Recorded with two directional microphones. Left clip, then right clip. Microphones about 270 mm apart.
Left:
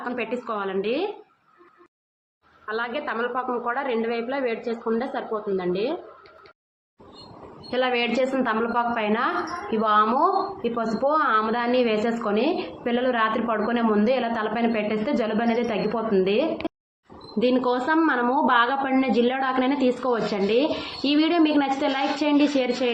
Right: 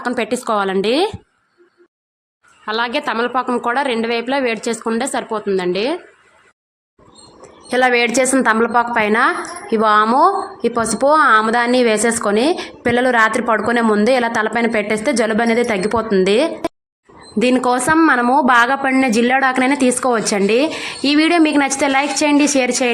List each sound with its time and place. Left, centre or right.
0.0 s a woman's voice: right
2.6 s a woman's voice: right
7.7 s a woman's voice: right